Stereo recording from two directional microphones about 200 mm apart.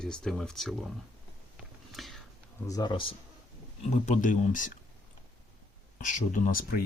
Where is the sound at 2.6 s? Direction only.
20° left (ahead or behind).